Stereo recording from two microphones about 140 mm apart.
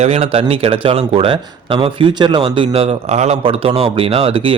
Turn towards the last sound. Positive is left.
turn(degrees=-40)  # may be behind; listen again after turning